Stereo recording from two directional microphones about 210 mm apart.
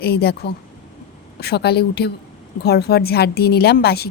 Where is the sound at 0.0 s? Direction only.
50° left (ahead or behind).